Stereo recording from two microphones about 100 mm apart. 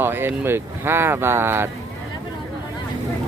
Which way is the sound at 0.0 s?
20° right (ahead or behind).